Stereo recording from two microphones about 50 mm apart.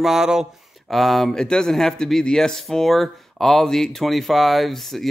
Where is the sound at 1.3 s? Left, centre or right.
Centre.